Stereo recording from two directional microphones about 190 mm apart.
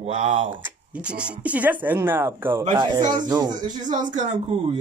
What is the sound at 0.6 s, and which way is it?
Speech, 10° right (ahead or behind).